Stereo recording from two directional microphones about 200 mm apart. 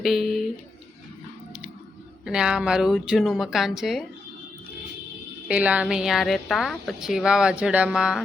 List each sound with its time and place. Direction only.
0.0 s speech: centre (ahead or behind)
2.2 s a woman's voice: 5° right (ahead or behind)
5.5 s a woman's voice: 5° right (ahead or behind)